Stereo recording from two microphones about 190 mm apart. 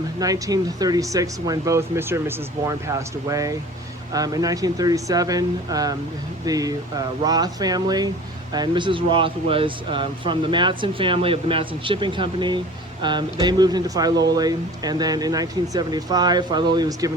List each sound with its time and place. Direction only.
0.2 s speech: 20° right (ahead or behind)